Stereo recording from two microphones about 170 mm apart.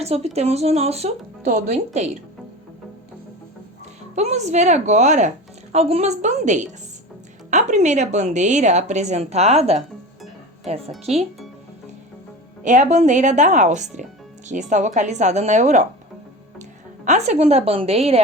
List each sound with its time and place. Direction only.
0.0 s speech: 40° right (ahead or behind)
4.1 s a woman's voice: 40° right (ahead or behind)
12.6 s a woman's voice: 45° right (ahead or behind)
17.1 s speech: 40° right (ahead or behind)